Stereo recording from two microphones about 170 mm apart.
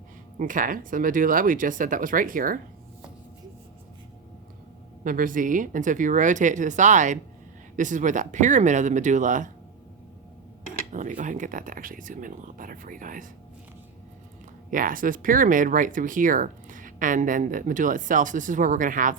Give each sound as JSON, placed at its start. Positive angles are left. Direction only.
{"t": 0.3, "sound": "speech", "side_deg": -50}
{"t": 5.0, "sound": "speech", "side_deg": -55}
{"t": 10.9, "sound": "speech", "side_deg": -50}
{"t": 14.7, "sound": "speech", "side_deg": -55}